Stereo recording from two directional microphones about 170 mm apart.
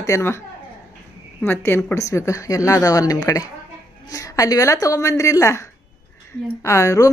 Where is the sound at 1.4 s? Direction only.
10° left (ahead or behind).